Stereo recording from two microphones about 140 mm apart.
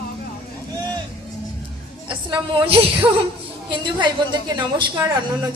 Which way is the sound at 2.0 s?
35° right (ahead or behind).